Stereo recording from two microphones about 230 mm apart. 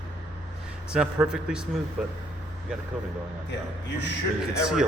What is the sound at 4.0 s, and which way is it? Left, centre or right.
Speech, left.